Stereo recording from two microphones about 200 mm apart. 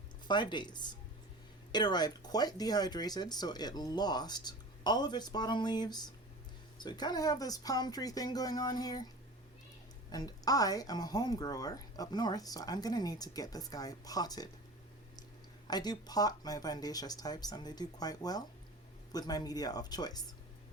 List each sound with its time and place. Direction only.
0.3 s a woman's voice: 20° left (ahead or behind)
10.1 s a woman's voice: 20° left (ahead or behind)
15.6 s a woman's voice: 20° left (ahead or behind)